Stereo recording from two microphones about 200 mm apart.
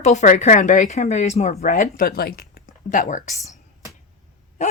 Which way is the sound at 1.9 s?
50° left (ahead or behind).